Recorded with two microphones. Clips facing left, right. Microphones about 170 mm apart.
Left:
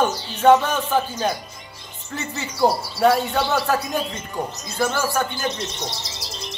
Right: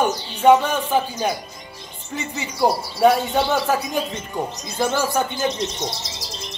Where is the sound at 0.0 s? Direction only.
10° right (ahead or behind).